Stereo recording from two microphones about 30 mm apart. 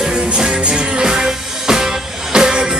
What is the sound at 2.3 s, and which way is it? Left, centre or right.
Music, right.